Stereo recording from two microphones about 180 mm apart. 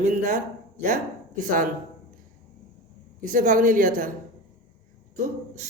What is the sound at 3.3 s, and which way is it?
Speech, 50° right (ahead or behind).